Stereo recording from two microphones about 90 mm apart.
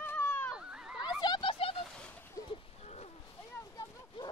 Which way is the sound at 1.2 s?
55° left (ahead or behind).